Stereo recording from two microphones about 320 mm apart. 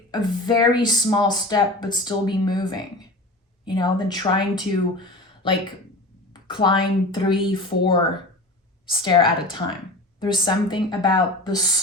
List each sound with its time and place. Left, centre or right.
0.1 s speech: centre